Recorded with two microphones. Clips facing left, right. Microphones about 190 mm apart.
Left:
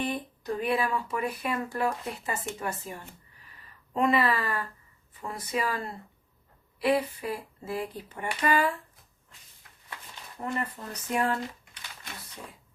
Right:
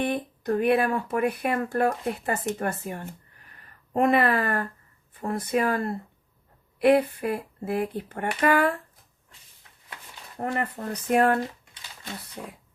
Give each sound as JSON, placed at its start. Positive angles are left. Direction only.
{"t": 0.0, "sound": "speech", "side_deg": -55}
{"t": 10.3, "sound": "speech", "side_deg": -60}
{"t": 11.7, "sound": "a sound", "side_deg": -25}